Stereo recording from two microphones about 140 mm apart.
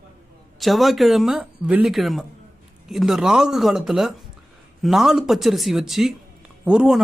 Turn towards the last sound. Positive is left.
turn(degrees=-5)  # may be behind; listen again after turning